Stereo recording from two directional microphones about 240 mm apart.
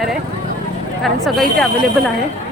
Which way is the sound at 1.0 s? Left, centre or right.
Centre.